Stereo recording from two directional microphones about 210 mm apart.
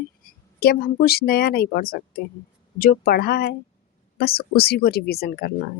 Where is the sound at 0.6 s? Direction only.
45° left (ahead or behind).